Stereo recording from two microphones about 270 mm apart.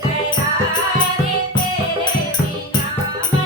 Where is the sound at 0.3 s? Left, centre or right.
Centre.